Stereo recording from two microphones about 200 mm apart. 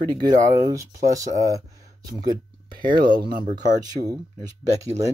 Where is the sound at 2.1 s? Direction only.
20° right (ahead or behind).